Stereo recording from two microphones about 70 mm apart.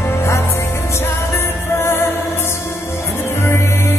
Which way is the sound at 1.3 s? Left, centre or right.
Left.